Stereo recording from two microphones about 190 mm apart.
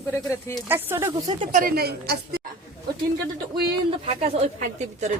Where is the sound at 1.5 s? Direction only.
45° right (ahead or behind).